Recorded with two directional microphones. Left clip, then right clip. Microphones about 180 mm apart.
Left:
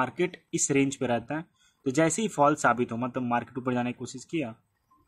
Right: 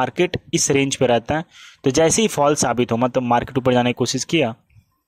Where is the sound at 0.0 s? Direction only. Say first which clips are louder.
Right 9 dB; 45° right (ahead or behind).